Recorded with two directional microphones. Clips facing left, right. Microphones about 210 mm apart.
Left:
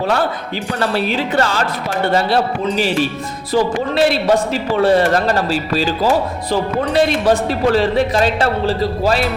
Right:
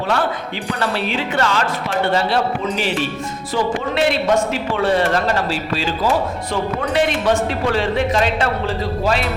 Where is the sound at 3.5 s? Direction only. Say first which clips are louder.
Left 4 dB; 35° left (ahead or behind).